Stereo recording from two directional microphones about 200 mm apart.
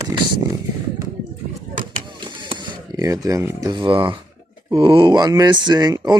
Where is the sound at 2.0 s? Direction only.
25° right (ahead or behind).